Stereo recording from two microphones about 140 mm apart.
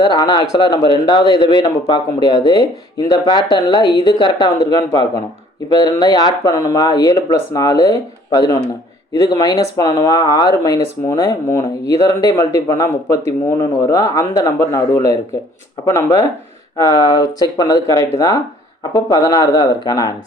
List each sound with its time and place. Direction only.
0.0 s a man's voice: 30° left (ahead or behind)